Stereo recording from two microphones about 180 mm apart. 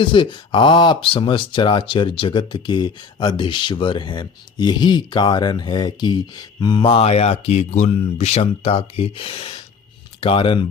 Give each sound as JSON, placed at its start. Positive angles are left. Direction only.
{"t": 0.0, "sound": "speech", "side_deg": 25}